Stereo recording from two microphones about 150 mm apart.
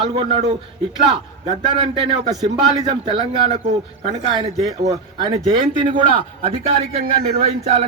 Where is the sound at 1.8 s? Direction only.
35° right (ahead or behind).